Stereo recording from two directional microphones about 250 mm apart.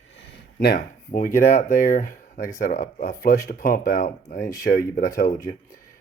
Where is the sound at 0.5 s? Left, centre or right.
Left.